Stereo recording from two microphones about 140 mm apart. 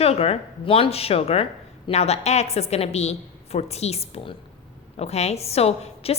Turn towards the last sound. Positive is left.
turn(degrees=45)  # may be behind; listen again after turning